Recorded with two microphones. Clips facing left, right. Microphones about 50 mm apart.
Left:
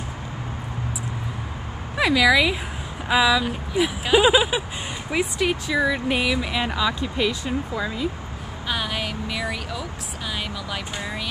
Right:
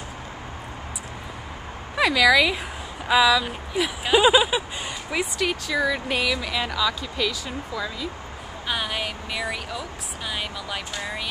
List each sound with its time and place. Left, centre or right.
2.0 s speech: centre; by 8.1 s left
8.6 s speech: centre